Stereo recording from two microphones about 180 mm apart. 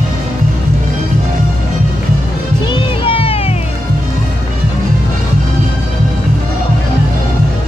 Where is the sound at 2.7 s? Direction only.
30° left (ahead or behind).